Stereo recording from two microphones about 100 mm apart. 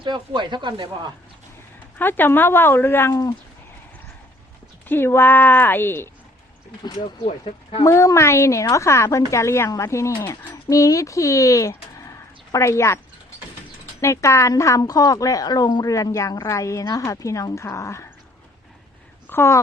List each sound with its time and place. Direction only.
0.0 s speech: 50° right (ahead or behind)
2.0 s speech: 20° left (ahead or behind)
3.1 s a woman's voice: 35° left (ahead or behind)
4.9 s speech: 25° left (ahead or behind)
7.0 s speech: 75° left (ahead or behind)
7.9 s a woman's voice: 30° left (ahead or behind)
14.0 s a woman's voice: 30° left (ahead or behind)
19.3 s speech: 25° left (ahead or behind)